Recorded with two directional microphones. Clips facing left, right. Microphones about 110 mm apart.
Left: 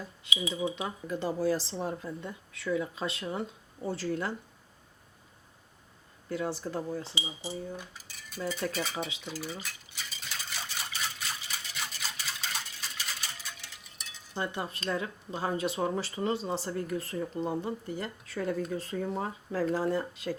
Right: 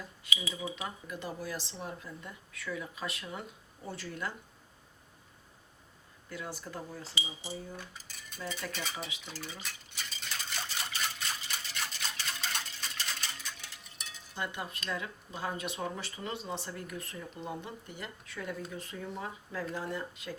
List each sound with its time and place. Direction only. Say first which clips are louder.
0.3 s speech: left 6 dB; 20° left (ahead or behind)
6.2 s speech: left 9 dB; 30° left (ahead or behind)
8.7 s speech: left 6 dB; centre (ahead or behind)
9.2 s a sound: left 5 dB; 5° left (ahead or behind)
14.3 s speech: left 4 dB; 35° left (ahead or behind)